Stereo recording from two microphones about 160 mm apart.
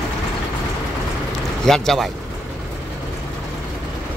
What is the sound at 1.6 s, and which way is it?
Speech, centre (ahead or behind).